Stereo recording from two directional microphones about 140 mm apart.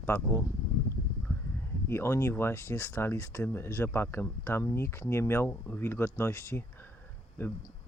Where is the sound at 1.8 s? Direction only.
20° left (ahead or behind).